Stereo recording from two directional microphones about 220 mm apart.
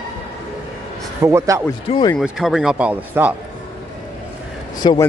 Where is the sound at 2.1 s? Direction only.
Centre (ahead or behind).